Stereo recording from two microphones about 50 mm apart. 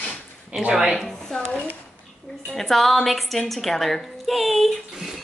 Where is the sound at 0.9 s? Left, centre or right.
Centre.